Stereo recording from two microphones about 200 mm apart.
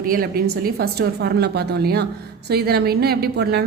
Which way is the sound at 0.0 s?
45° right (ahead or behind).